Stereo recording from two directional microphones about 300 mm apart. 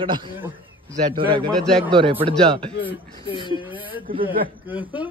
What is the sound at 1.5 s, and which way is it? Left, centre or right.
Speech, centre.